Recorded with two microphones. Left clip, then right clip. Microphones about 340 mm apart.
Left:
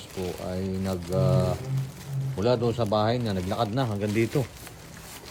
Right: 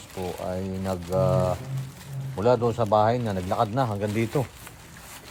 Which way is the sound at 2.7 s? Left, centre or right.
Centre.